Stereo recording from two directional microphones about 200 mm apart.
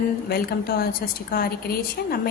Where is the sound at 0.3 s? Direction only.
50° left (ahead or behind).